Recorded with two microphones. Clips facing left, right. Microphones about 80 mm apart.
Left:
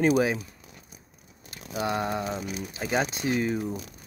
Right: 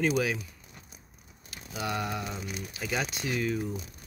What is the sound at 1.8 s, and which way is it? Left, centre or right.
Speech, left.